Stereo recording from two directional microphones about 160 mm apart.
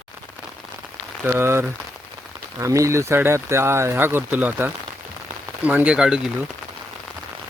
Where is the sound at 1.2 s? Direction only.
15° right (ahead or behind).